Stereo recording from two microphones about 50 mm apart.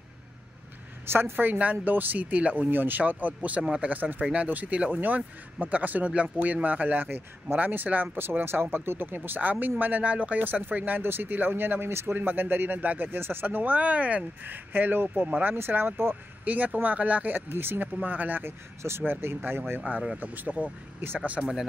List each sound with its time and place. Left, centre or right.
1.0 s speech: right
3.6 s speech: centre
3.9 s speech: right
8.2 s speech: right
12.2 s speech: right
16.4 s speech: right
17.5 s speech: right
18.0 s speech: right
18.4 s speech: right
20.2 s speech: right
21.4 s speech: centre